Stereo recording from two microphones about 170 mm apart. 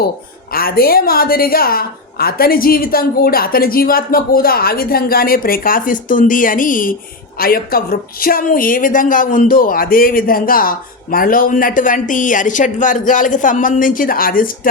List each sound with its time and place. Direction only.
0.5 s a woman's voice: 60° left (ahead or behind)